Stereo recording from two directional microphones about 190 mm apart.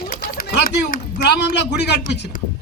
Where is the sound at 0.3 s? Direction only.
55° left (ahead or behind).